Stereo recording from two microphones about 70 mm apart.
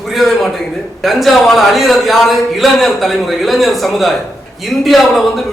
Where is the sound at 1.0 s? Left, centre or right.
Centre.